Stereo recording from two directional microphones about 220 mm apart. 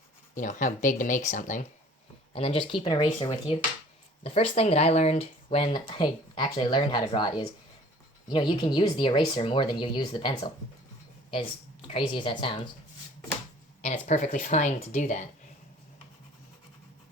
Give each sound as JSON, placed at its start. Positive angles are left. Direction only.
{"t": 0.3, "sound": "speech", "side_deg": 35}
{"t": 11.9, "sound": "speech", "side_deg": 25}
{"t": 13.8, "sound": "speech", "side_deg": 35}